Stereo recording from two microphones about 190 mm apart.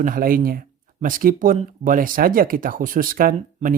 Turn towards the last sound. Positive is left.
turn(degrees=-45)  # may be behind; listen again after turning